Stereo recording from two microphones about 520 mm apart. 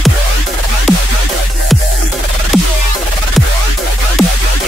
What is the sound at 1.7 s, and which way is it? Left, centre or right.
Music, centre.